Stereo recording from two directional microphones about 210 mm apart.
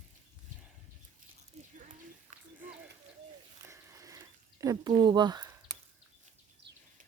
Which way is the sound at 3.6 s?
15° right (ahead or behind).